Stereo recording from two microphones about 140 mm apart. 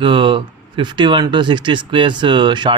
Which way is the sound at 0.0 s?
35° right (ahead or behind).